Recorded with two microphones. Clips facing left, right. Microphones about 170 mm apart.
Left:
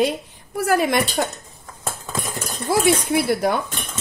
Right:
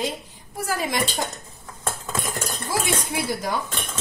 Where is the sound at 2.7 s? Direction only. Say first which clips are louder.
Left 7 dB; 60° left (ahead or behind).